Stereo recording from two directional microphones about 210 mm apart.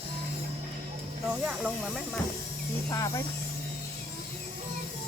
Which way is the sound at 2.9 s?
15° left (ahead or behind).